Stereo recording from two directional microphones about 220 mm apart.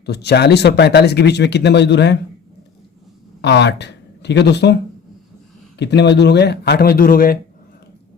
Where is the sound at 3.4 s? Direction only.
50° left (ahead or behind).